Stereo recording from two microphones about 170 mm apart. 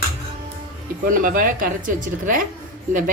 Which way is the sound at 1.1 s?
55° right (ahead or behind).